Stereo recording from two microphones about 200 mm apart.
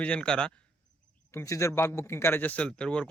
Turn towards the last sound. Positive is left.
turn(degrees=5)  # may be behind; listen again after turning